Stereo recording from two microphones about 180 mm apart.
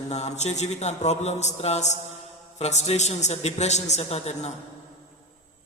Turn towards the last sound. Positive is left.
turn(degrees=35)  # may be behind; listen again after turning